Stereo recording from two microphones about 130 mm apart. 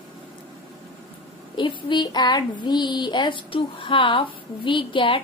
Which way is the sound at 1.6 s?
40° left (ahead or behind).